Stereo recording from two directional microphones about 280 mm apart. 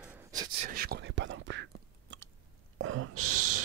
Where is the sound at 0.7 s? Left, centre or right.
Right.